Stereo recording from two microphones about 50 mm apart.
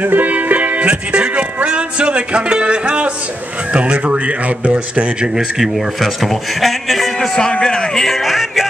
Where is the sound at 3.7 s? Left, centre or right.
Right.